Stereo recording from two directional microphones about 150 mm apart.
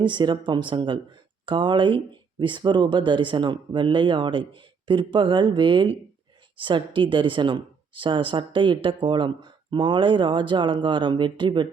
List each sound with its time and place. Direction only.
0.0 s speech: 30° right (ahead or behind)